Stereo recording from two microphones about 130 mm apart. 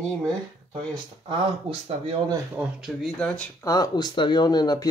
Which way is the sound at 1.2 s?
45° right (ahead or behind).